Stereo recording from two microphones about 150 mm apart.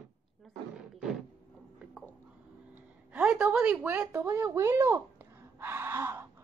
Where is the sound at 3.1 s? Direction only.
10° right (ahead or behind).